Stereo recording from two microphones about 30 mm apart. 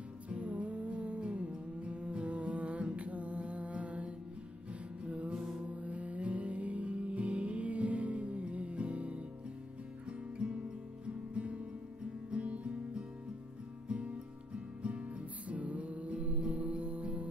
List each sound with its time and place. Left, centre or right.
0.3 s music: right
5.3 s mantra: centre
5.7 s music: right
13.8 s music: right
15.4 s music: right